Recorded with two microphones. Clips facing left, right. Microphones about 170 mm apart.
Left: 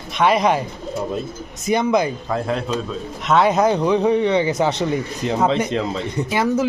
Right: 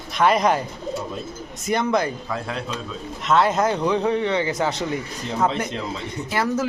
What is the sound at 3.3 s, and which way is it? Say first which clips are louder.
Speech: left 3 dB; 15° left (ahead or behind).